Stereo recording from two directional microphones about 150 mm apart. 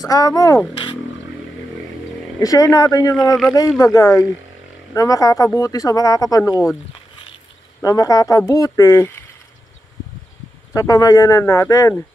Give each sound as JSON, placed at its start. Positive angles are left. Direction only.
{"t": 0.0, "sound": "speech", "side_deg": 25}
{"t": 2.4, "sound": "speech", "side_deg": 25}
{"t": 7.8, "sound": "speech", "side_deg": 25}
{"t": 10.7, "sound": "speech", "side_deg": 25}